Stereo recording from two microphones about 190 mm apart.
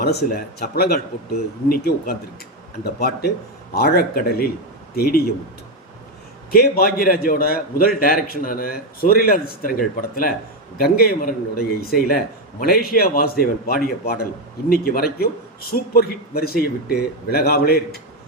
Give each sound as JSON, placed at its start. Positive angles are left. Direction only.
{"t": 0.0, "sound": "a man's voice", "side_deg": 55}
{"t": 6.5, "sound": "a man's voice", "side_deg": 50}